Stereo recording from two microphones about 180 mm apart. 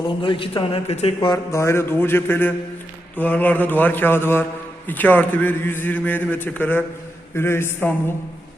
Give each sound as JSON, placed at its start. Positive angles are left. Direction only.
{"t": 0.2, "sound": "speech", "side_deg": 30}